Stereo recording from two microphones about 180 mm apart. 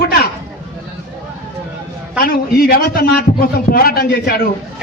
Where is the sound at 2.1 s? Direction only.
55° left (ahead or behind).